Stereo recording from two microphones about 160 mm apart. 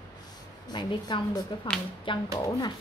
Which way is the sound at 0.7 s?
25° left (ahead or behind).